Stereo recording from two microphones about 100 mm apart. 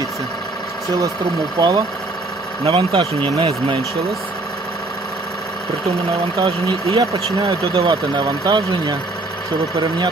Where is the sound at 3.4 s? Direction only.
85° right.